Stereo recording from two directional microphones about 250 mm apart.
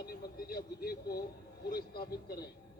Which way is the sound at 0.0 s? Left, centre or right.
Left.